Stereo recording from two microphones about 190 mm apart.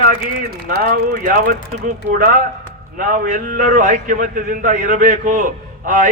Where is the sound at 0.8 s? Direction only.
50° right (ahead or behind).